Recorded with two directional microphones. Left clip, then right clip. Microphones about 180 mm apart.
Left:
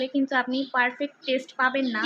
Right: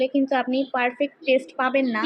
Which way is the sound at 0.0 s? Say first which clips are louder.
Right 3 dB; 10° right (ahead or behind).